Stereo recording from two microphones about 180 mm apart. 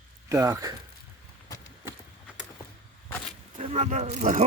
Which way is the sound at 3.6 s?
35° right (ahead or behind).